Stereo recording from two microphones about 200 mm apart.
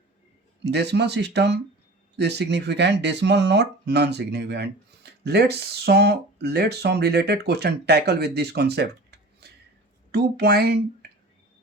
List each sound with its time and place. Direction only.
0.6 s speech: 55° right (ahead or behind)